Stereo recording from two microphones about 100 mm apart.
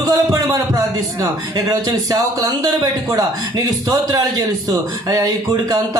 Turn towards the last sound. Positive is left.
turn(degrees=-40)  # may be behind; listen again after turning